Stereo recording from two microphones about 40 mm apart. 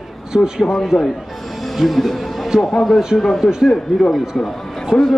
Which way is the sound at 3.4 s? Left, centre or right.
Centre.